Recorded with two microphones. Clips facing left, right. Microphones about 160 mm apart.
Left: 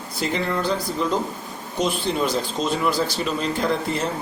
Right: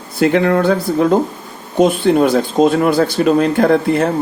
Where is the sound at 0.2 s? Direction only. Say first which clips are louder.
Right 12 dB; 65° right (ahead or behind).